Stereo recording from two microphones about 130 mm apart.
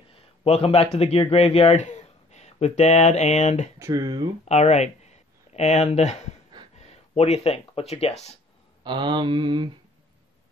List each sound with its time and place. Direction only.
0.1 s speech: 45° left (ahead or behind); by 3.7 s 65° left (ahead or behind)
3.8 s speech: 25° right (ahead or behind)
4.5 s speech: 60° left (ahead or behind)
8.8 s mantra: 35° right (ahead or behind)